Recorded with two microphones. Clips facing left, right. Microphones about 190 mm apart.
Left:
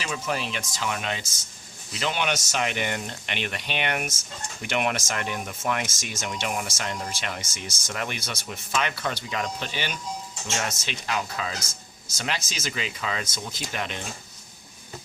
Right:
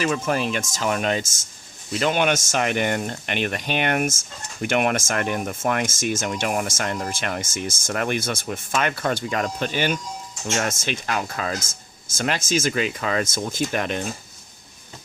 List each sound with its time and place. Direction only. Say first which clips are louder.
0.0 s speech: right 7 dB; 50° right (ahead or behind)